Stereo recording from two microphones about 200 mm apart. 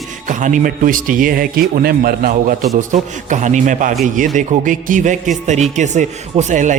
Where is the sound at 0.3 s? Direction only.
40° right (ahead or behind).